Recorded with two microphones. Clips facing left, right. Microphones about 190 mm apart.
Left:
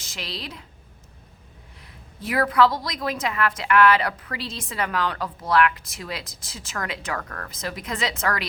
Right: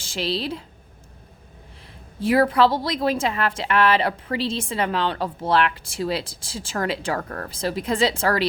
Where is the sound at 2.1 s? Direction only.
30° right (ahead or behind).